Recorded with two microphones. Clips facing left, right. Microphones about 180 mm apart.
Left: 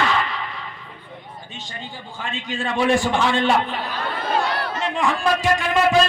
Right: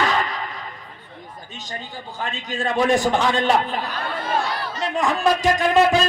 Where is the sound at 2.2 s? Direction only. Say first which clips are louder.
Right 1 dB; 40° right (ahead or behind).